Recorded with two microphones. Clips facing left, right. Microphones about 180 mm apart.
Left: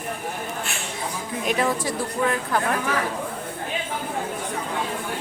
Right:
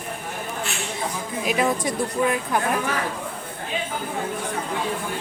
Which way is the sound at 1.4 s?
15° right (ahead or behind).